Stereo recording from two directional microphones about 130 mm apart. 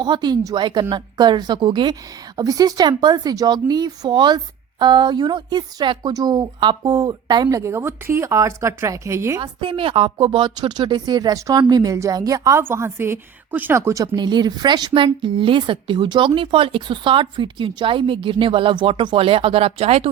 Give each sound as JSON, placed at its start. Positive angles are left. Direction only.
{"t": 0.0, "sound": "a woman's voice", "side_deg": -35}
{"t": 7.6, "sound": "speech", "side_deg": -20}
{"t": 9.4, "sound": "a woman's voice", "side_deg": -40}